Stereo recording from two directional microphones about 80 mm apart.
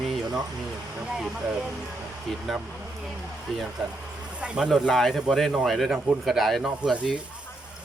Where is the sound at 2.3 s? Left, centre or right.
Centre.